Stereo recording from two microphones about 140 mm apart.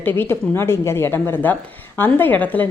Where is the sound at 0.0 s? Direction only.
15° left (ahead or behind).